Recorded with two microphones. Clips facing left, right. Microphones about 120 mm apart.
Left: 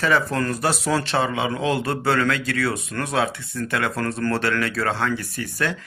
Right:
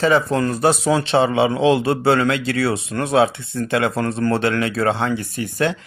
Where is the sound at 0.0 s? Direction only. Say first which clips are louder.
Right 4 dB; 20° right (ahead or behind).